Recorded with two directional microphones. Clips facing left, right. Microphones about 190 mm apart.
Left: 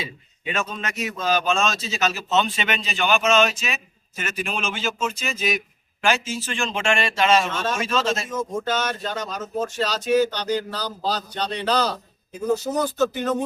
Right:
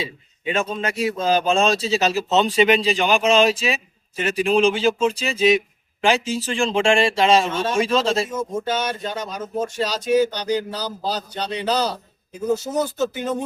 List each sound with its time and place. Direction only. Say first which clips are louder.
0.0 s a man's voice: right 4 dB; 30° right (ahead or behind)
7.4 s speech: right 3 dB; 10° right (ahead or behind)
7.8 s a man's voice: right 7 dB; 30° right (ahead or behind)
8.3 s speech: right 1 dB; 10° right (ahead or behind)